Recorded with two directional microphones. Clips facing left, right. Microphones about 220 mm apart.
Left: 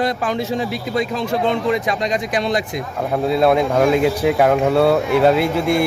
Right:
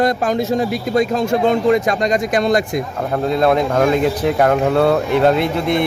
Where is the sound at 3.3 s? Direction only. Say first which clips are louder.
Even; 5° left (ahead or behind).